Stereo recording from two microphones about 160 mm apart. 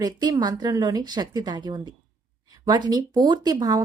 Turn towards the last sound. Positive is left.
turn(degrees=-25)  # may be behind; listen again after turning